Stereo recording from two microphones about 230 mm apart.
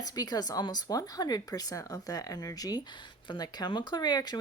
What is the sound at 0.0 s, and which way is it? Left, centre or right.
Speech, centre.